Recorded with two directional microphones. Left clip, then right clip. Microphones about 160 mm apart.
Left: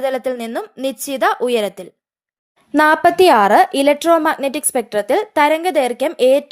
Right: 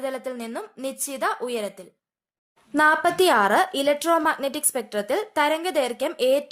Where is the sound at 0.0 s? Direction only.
40° left (ahead or behind).